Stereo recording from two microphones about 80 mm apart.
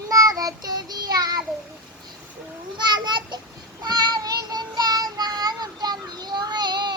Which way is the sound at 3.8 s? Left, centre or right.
Right.